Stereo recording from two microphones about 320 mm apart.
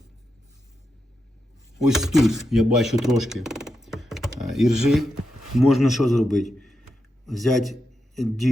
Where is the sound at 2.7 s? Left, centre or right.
Centre.